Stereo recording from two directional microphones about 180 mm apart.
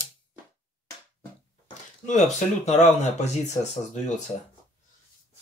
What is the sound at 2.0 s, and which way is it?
Speech, 40° left (ahead or behind).